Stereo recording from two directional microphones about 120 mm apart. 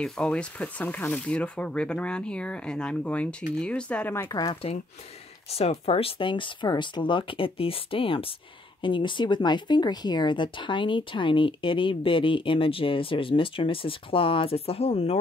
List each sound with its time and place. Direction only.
0.0 s speech: 10° left (ahead or behind)
4.5 s speech: 50° left (ahead or behind)